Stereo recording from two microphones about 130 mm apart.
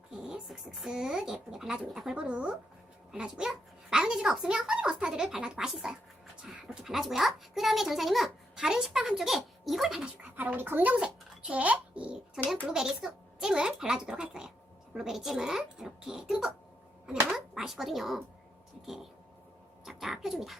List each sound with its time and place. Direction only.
0.1 s a child's voice: 5° right (ahead or behind)
19.8 s a child's voice: centre (ahead or behind)